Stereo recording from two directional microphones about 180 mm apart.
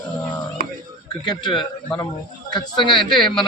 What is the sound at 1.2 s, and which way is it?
Speech, 25° left (ahead or behind).